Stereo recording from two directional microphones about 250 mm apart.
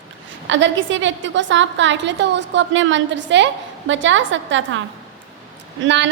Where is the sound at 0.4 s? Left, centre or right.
Right.